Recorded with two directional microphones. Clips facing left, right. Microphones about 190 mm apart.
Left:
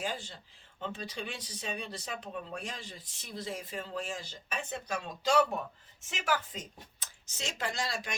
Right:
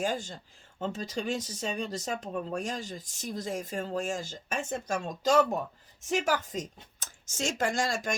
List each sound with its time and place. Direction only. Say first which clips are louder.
0.0 s speech: right 6 dB; 45° right (ahead or behind)